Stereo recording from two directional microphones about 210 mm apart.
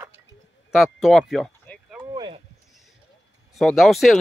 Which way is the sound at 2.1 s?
20° right (ahead or behind).